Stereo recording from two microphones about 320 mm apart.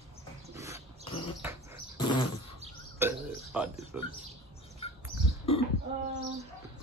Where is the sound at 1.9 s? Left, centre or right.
Centre.